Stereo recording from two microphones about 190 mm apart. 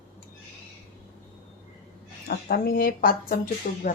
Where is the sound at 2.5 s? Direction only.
50° left (ahead or behind).